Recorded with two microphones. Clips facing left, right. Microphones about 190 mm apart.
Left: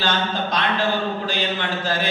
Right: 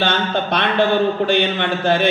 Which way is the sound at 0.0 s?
65° right (ahead or behind).